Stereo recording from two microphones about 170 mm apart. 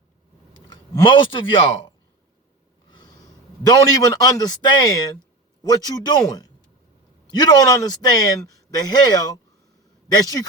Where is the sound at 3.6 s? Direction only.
20° left (ahead or behind).